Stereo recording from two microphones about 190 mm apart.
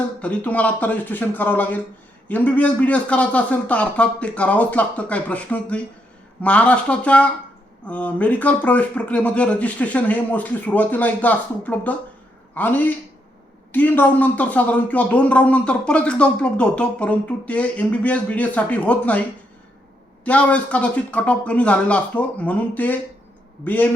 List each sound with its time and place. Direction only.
0.2 s speech: 5° left (ahead or behind)
20.2 s speech: 5° left (ahead or behind)